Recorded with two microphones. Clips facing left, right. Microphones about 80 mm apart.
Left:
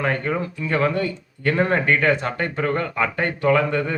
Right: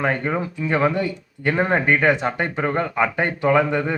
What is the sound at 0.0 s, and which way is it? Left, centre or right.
Speech, centre.